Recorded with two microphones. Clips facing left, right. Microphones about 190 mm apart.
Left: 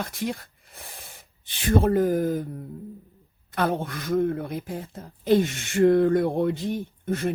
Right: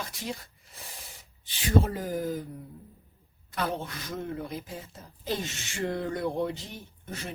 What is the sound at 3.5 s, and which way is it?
Speech, 55° left (ahead or behind).